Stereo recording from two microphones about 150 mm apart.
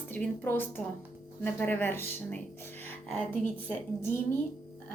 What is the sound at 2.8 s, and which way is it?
Music, 15° left (ahead or behind).